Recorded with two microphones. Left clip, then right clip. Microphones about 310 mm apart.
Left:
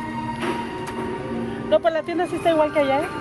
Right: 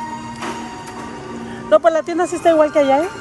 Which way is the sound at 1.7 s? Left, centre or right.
Right.